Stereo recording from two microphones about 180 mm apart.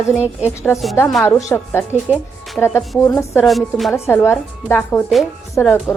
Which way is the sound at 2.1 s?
10° right (ahead or behind).